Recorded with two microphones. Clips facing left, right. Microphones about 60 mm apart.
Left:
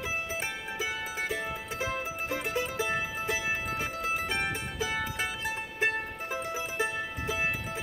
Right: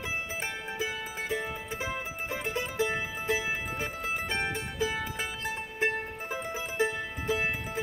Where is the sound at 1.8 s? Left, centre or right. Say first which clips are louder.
Left 4 dB; centre.